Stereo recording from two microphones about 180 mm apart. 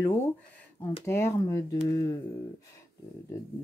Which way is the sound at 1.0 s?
15° left (ahead or behind).